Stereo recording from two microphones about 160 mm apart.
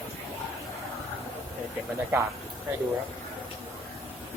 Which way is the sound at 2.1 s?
15° right (ahead or behind).